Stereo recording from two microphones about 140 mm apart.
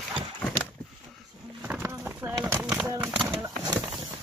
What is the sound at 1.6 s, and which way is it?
Clip-clop, 15° right (ahead or behind).